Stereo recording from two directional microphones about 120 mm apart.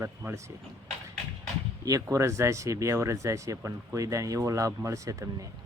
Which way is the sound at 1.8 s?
30° right (ahead or behind).